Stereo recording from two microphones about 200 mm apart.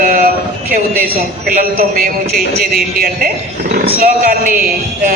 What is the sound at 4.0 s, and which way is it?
Speech, 45° right (ahead or behind).